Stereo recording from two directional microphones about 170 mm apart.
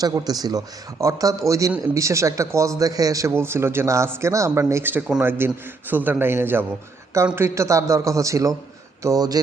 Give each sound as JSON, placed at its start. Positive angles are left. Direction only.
{"t": 0.0, "sound": "speech", "side_deg": -20}